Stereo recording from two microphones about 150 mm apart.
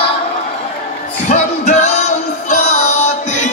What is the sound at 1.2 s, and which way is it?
Music, 50° left (ahead or behind).